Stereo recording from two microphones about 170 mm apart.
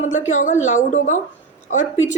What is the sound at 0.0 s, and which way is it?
A woman's voice, 45° left (ahead or behind).